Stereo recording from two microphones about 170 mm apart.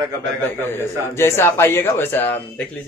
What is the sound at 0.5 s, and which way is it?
A man's voice, 15° left (ahead or behind).